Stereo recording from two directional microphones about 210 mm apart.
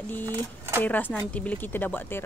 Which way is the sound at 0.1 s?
10° left (ahead or behind).